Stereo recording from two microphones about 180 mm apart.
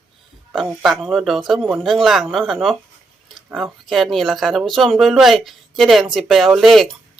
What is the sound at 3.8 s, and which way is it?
Speech, centre (ahead or behind).